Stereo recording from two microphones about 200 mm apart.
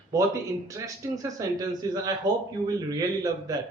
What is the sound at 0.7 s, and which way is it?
A man's voice, 15° right (ahead or behind).